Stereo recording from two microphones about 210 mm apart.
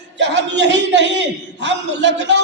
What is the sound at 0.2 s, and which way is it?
A man's voice, 55° right (ahead or behind).